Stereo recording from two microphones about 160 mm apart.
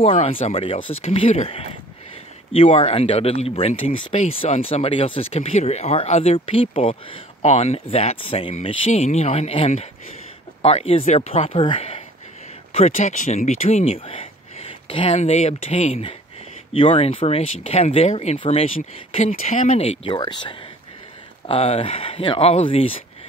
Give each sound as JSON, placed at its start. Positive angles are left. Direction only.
{"t": 0.0, "sound": "speech", "side_deg": 40}
{"t": 12.7, "sound": "speech", "side_deg": 45}
{"t": 13.6, "sound": "speech", "side_deg": 40}